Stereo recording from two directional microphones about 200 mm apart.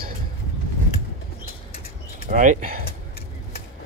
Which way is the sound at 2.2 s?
40° right (ahead or behind).